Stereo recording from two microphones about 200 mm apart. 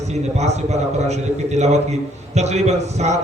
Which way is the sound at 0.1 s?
35° right (ahead or behind).